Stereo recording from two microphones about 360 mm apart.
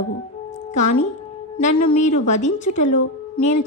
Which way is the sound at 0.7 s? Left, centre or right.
Centre.